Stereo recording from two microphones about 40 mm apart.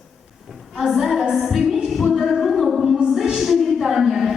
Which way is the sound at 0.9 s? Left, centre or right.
Centre.